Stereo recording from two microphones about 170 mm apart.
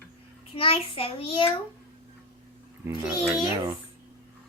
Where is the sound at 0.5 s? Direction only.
30° left (ahead or behind).